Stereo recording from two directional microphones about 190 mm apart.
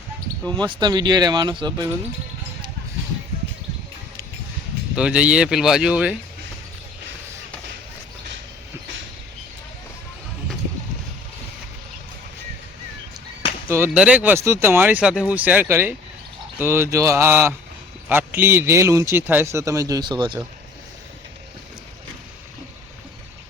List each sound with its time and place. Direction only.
0.6 s speech: 20° right (ahead or behind)
4.9 s speech: 5° right (ahead or behind)
13.7 s speech: 10° right (ahead or behind)